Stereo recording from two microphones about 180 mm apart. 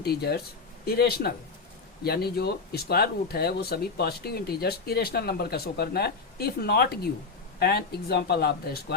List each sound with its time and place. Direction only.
0.0 s speech: 60° left (ahead or behind)